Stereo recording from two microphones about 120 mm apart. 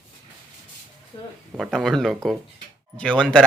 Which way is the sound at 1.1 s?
45° left (ahead or behind).